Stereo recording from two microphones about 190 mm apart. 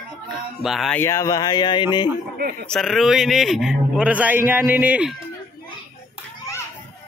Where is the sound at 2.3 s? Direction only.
55° right (ahead or behind).